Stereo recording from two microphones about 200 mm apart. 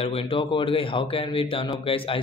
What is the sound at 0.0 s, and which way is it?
Speech, 30° left (ahead or behind).